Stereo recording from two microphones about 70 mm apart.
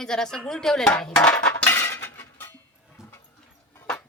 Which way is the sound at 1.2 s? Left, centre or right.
Centre.